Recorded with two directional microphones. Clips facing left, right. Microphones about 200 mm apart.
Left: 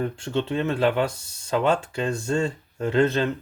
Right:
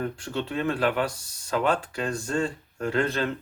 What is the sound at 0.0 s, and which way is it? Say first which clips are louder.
Speech: left 4 dB; 25° left (ahead or behind).